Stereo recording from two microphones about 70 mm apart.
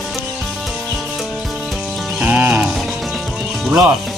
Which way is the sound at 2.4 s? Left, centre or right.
Right.